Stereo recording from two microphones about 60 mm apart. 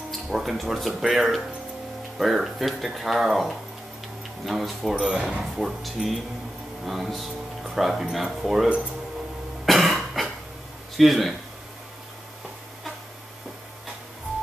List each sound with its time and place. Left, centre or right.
0.1 s speech: centre
4.9 s speech: centre
5.4 s speech: centre
9.7 s cough: centre
11.0 s speech: centre